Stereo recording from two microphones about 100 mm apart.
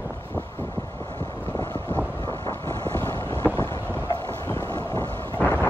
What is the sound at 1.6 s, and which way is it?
Vehicle, 25° left (ahead or behind).